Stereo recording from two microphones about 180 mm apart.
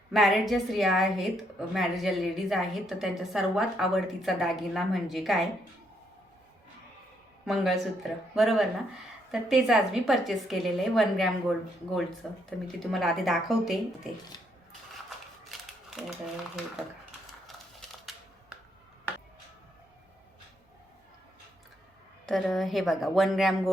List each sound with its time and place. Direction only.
0.1 s a woman's voice: centre (ahead or behind)
7.4 s a woman's voice: centre (ahead or behind)
14.3 s a sound: 25° left (ahead or behind)
16.0 s a woman's voice: centre (ahead or behind)
17.4 s crushing: centre (ahead or behind)
22.3 s a woman's voice: centre (ahead or behind)